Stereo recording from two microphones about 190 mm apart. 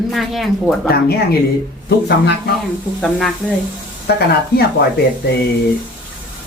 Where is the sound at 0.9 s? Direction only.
55° left (ahead or behind).